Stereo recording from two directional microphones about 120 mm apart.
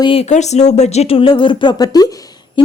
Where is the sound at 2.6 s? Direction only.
45° left (ahead or behind).